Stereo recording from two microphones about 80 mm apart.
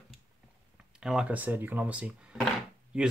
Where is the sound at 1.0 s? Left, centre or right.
Centre.